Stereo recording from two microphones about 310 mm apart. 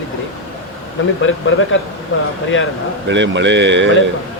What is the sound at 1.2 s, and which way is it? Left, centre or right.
Speech, left.